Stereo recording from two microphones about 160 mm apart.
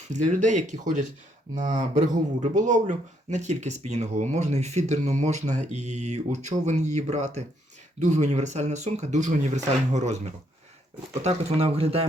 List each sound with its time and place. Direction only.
0.1 s speech: 50° right (ahead or behind)
11.2 s speech: 40° right (ahead or behind)